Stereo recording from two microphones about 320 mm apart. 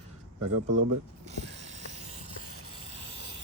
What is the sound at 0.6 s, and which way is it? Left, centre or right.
Speech, right.